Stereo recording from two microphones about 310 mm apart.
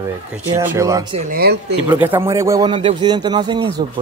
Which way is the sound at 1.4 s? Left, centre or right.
Right.